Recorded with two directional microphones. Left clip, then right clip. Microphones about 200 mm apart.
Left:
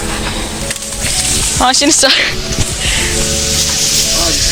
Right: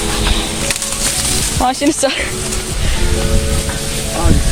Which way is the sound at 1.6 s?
5° right (ahead or behind).